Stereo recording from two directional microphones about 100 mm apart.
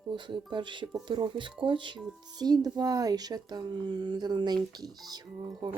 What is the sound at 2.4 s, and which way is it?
Speech, 40° right (ahead or behind).